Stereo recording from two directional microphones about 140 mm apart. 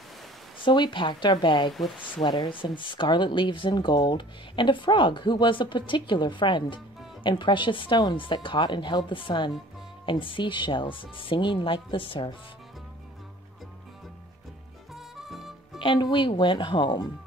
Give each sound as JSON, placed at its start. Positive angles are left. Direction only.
{"t": 0.7, "sound": "speech", "side_deg": 35}
{"t": 15.0, "sound": "music", "side_deg": 0}
{"t": 15.8, "sound": "speech", "side_deg": 35}